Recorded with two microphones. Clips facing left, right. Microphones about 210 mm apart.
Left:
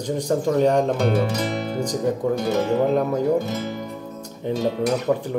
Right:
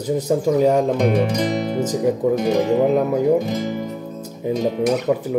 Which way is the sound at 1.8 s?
5° right (ahead or behind).